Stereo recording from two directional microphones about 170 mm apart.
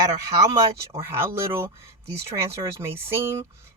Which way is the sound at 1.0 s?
15° right (ahead or behind).